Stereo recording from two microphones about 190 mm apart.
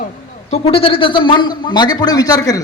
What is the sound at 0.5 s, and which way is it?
A man's voice, 30° left (ahead or behind).